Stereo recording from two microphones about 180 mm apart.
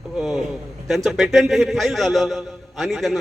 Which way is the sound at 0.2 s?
Centre (ahead or behind).